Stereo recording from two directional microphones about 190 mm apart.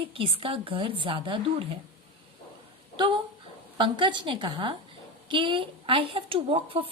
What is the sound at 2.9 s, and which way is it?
A woman's voice, 25° right (ahead or behind).